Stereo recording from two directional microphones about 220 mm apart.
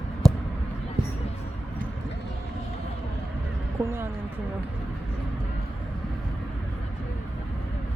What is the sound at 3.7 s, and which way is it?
Speech, 10° right (ahead or behind).